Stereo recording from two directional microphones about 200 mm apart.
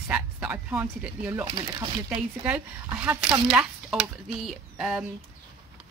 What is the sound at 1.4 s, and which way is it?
Speech, 25° right (ahead or behind).